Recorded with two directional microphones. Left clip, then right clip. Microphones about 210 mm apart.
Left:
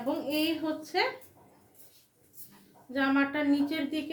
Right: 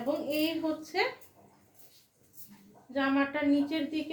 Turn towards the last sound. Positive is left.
turn(degrees=15)  # may be behind; listen again after turning